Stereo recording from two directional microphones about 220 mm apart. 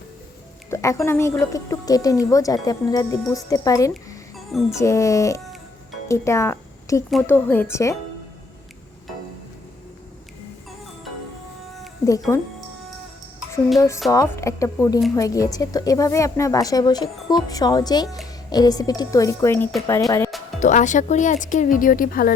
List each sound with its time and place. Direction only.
0.7 s speech: 15° left (ahead or behind)
12.3 s speech: 10° left (ahead or behind)
13.7 s speech: 15° left (ahead or behind)
20.6 s speech: 35° left (ahead or behind)